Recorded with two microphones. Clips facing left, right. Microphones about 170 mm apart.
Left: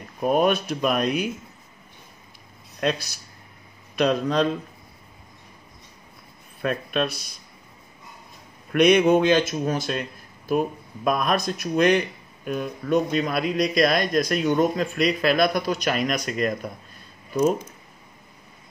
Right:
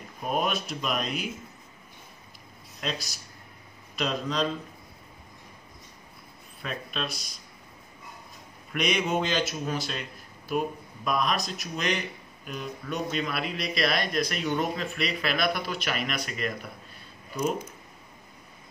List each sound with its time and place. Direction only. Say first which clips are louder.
0.2 s speech: left 8 dB; 50° left (ahead or behind)
2.8 s speech: left 9 dB; 60° left (ahead or behind)
6.6 s speech: left 10 dB; 55° left (ahead or behind)
8.7 s speech: left 10 dB; 60° left (ahead or behind)
11.1 s speech: left 5 dB; 50° left (ahead or behind)